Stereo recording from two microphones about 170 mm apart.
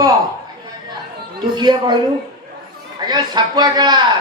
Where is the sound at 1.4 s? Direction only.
25° right (ahead or behind).